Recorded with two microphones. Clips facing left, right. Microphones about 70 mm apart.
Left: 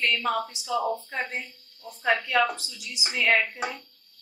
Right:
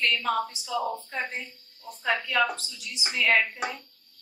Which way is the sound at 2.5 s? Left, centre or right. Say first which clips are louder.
Even; centre.